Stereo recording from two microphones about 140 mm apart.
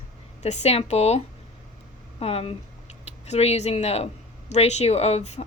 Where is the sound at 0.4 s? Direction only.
50° left (ahead or behind).